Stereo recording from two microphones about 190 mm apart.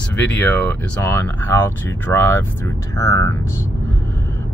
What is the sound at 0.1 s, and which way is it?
Speech, 10° left (ahead or behind).